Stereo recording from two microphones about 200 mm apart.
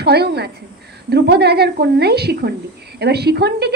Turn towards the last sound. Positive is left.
turn(degrees=-55)  # may be behind; listen again after turning